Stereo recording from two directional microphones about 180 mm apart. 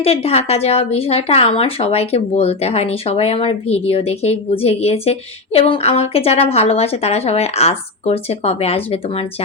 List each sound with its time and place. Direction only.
0.0 s speech: 35° left (ahead or behind)